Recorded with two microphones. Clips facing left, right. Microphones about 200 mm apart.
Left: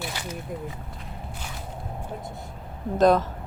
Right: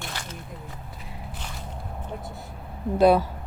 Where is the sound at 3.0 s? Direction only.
10° right (ahead or behind).